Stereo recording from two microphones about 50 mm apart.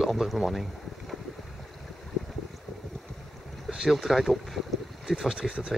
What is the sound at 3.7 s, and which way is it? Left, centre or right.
Speech, centre.